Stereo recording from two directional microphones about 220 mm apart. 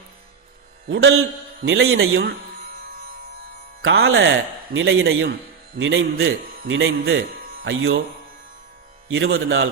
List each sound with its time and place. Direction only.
0.9 s a man's voice: 60° right (ahead or behind)
3.8 s a man's voice: 60° right (ahead or behind)
9.0 s a man's voice: 60° right (ahead or behind)